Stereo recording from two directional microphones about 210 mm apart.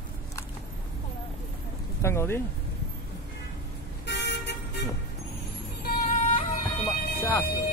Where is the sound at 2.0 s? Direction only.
10° left (ahead or behind).